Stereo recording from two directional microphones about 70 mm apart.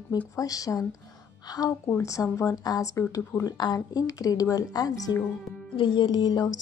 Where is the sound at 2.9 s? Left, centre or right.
Left.